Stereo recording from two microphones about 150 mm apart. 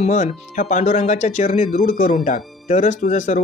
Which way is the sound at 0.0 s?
55° left (ahead or behind).